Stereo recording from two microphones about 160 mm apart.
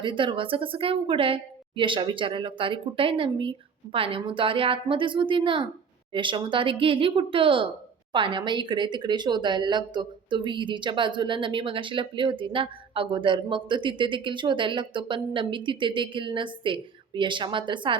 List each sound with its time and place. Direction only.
0.0 s speech: 30° right (ahead or behind)